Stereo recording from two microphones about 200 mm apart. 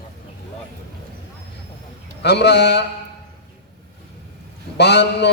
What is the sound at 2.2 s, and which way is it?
Speech, 55° left (ahead or behind).